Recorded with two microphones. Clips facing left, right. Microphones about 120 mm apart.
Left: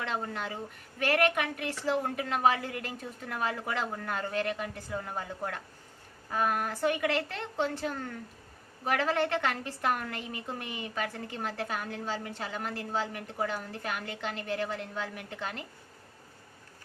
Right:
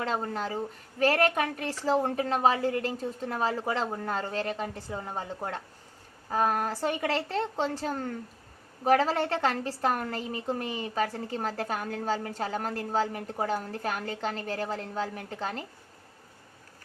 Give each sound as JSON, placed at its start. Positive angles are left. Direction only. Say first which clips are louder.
{"t": 0.0, "sound": "a woman's voice", "louder": "right 4 dB", "side_deg": -35}